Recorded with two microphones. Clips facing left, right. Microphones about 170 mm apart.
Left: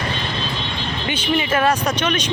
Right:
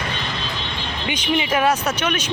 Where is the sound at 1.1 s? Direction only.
10° right (ahead or behind).